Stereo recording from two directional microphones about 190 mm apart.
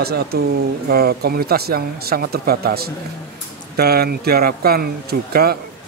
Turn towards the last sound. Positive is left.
turn(degrees=-55)  # may be behind; listen again after turning